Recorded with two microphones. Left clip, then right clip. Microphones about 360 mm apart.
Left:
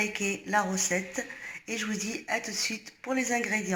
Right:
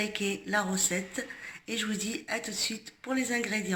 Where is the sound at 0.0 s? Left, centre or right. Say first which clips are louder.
Left 2 dB; centre.